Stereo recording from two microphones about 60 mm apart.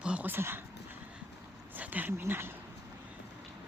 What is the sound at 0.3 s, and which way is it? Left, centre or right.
Speech, right.